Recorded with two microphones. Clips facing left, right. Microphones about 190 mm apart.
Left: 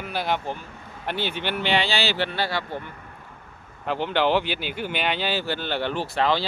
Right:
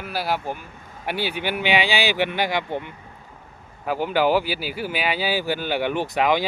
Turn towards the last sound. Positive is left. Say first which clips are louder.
# right 2 dB
turn(degrees=-15)  # may be behind; listen again after turning